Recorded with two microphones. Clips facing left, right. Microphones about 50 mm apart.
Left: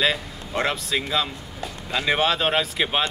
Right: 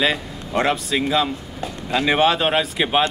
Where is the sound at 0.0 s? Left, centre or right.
Centre.